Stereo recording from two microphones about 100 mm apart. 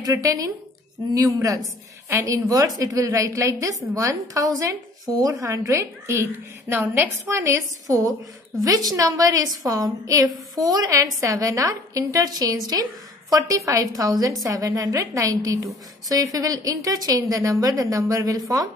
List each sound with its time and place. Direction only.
0.0 s a woman's voice: 35° right (ahead or behind)